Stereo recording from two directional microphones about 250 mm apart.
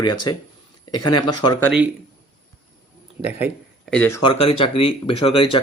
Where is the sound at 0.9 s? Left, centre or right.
Left.